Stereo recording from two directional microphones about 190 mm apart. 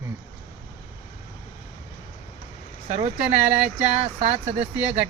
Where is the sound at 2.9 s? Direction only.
40° right (ahead or behind).